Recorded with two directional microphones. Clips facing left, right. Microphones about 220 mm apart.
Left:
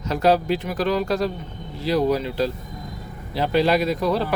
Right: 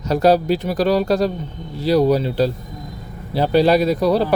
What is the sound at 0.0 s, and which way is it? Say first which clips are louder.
Speech: right 4 dB; 35° right (ahead or behind).